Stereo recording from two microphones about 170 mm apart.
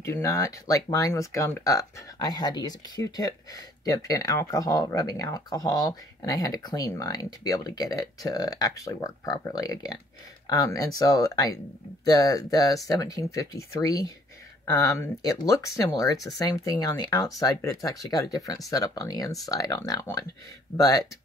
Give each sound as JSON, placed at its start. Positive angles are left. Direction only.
{"t": 0.0, "sound": "speech", "side_deg": 15}